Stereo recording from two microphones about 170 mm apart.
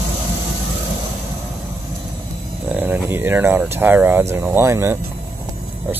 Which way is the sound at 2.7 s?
10° right (ahead or behind).